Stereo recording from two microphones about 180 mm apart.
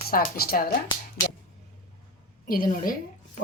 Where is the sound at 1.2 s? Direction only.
15° left (ahead or behind).